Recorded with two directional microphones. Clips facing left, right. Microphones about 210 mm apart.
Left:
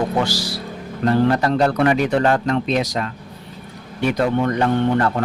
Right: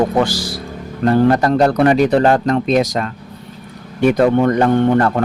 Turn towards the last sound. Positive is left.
turn(degrees=-50)  # may be behind; listen again after turning